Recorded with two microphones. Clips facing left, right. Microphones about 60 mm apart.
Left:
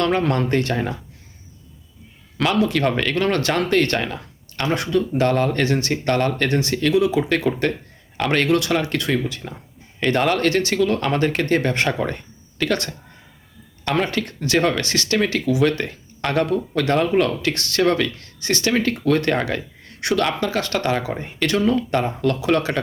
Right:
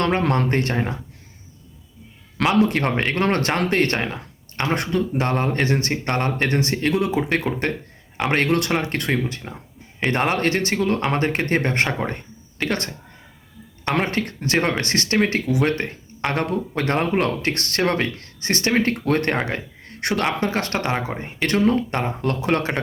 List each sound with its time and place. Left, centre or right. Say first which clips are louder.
0.0 s speech: left 1 dB; right
2.6 s speech: even; right
4.0 s a sound: even; right
4.7 s speech: left 2 dB; right
5.2 s speech: left 3 dB; right
7.3 s speech: left 3 dB; right
8.4 s speech: left 2 dB; right
12.0 s a sound: left 1 dB; right
13.9 s speech: left 1 dB; right
17.0 s speech: left 3 dB; right
21.1 s speech: left 2 dB; right
21.6 s speech: even; right